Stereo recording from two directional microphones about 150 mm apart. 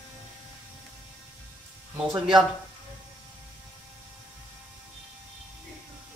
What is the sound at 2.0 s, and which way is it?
Speech, 5° right (ahead or behind).